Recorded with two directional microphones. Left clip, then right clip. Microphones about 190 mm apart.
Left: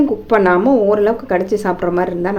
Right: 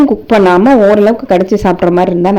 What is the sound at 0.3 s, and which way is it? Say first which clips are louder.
Speech: right 5 dB; 35° right (ahead or behind).